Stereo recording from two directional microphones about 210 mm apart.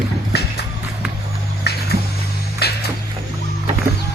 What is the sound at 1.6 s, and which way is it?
Music, 50° left (ahead or behind).